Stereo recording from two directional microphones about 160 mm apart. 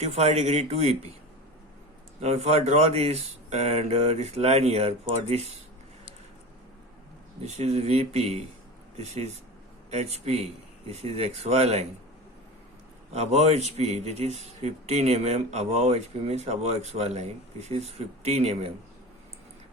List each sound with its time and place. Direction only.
0.0 s speech: 40° right (ahead or behind)
2.2 s speech: 40° right (ahead or behind)
7.4 s speech: 45° right (ahead or behind)
13.1 s speech: 45° right (ahead or behind)